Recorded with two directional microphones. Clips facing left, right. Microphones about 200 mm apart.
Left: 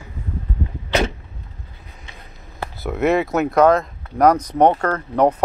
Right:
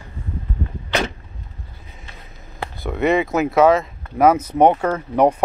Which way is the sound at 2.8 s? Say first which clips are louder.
Even; centre (ahead or behind).